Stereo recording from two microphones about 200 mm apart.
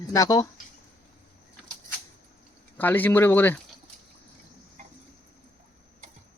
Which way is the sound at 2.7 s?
10° left (ahead or behind).